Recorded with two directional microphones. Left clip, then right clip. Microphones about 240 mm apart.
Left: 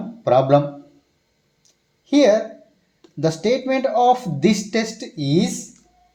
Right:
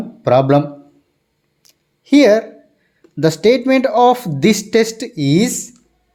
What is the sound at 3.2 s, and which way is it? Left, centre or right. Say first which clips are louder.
Speech: right 7 dB; right.